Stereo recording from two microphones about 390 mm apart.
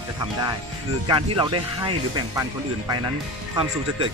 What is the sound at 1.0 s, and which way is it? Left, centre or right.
Speech, centre.